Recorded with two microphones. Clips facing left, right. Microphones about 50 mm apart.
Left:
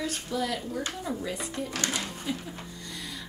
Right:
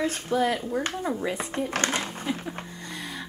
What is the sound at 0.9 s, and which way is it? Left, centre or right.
Speech, right.